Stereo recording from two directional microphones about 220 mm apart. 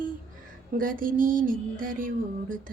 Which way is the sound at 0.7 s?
40° right (ahead or behind).